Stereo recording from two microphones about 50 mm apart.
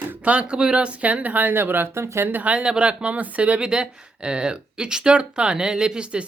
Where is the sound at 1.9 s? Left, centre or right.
Right.